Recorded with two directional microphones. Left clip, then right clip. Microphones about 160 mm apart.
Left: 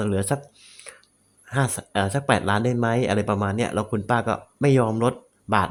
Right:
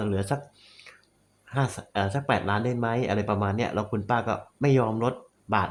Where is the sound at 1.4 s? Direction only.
30° left (ahead or behind).